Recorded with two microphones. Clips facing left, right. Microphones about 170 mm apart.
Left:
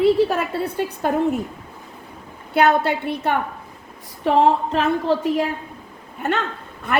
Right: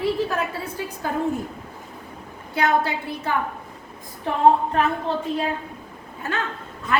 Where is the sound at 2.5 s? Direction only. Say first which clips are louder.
Left 4 dB; 65° left (ahead or behind).